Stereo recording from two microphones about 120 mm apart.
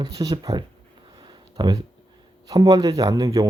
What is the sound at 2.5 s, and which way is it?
Speech, 30° right (ahead or behind).